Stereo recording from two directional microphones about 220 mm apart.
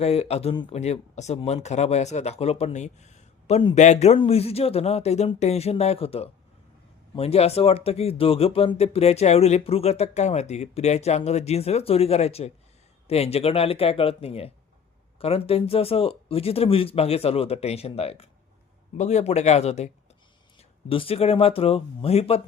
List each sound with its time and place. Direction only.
0.0 s speech: 30° left (ahead or behind)
20.9 s speech: 25° left (ahead or behind)